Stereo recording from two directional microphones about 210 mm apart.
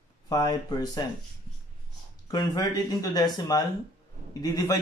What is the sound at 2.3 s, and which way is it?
Speech, 20° left (ahead or behind).